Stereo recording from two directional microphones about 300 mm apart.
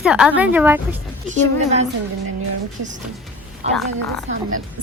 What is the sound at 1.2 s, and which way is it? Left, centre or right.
Speech, right.